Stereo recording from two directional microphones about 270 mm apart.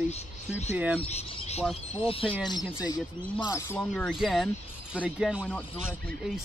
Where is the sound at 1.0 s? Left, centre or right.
Left; by 5.4 s centre.